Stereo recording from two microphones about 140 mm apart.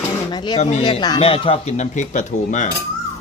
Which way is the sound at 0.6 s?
55° left (ahead or behind).